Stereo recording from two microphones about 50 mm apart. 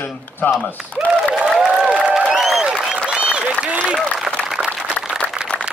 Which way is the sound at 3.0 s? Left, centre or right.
Right.